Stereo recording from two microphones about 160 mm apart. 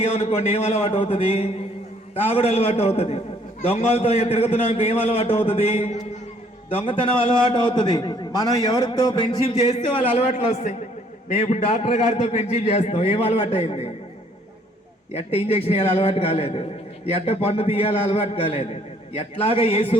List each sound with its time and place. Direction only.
0.0 s a man's voice: 40° left (ahead or behind)
15.1 s a man's voice: 40° left (ahead or behind)